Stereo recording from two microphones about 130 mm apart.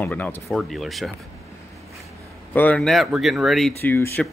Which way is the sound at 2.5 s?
15° left (ahead or behind).